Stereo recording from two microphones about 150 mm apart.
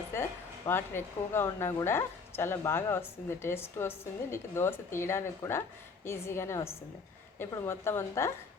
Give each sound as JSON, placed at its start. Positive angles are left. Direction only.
{"t": 0.1, "sound": "a woman's voice", "side_deg": 15}